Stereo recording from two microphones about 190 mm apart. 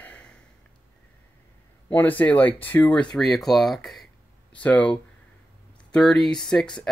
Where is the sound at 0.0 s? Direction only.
5° left (ahead or behind).